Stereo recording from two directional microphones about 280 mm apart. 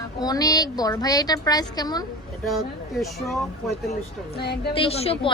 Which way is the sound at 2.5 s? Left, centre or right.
Centre.